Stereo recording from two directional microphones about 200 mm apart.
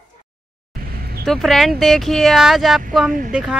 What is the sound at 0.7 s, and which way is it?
Music, 50° right (ahead or behind).